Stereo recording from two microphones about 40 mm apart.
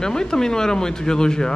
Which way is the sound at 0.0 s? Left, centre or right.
Centre.